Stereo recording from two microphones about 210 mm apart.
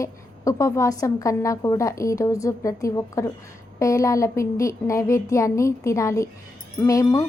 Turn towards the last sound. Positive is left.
turn(degrees=15)  # may be behind; listen again after turning